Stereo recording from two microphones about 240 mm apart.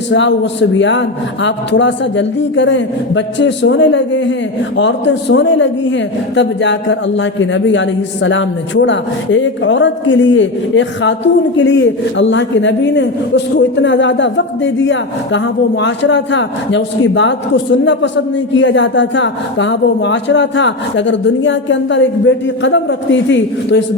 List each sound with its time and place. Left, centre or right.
0.1 s a man's voice: left